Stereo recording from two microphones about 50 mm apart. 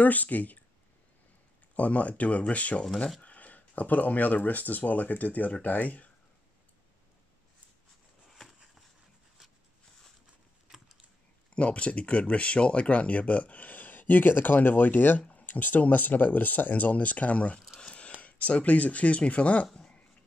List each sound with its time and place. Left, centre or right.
0.0 s speech: left
1.8 s speech: left
11.5 s speech: left
17.7 s a sound: left
18.2 s speech: left